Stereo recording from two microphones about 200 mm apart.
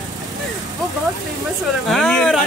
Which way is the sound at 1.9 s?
5° left (ahead or behind).